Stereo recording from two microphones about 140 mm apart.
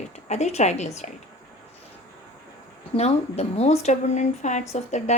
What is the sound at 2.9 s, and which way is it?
A woman's voice, 50° left (ahead or behind).